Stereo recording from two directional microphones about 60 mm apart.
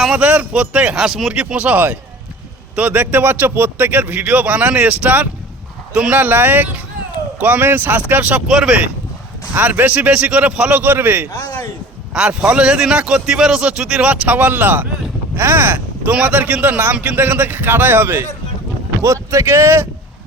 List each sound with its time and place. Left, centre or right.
0.1 s a man's voice: right; by 1.3 s centre
1.3 s a man's voice: centre
5.9 s speech: centre
6.1 s a man's voice: right
8.4 s speech: centre
9.6 s a man's voice: right
11.3 s a man's voice: left
12.1 s a man's voice: centre; by 18.3 s right
19.0 s speech: right